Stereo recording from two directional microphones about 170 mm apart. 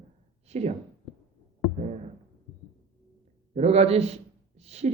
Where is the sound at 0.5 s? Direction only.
40° right (ahead or behind).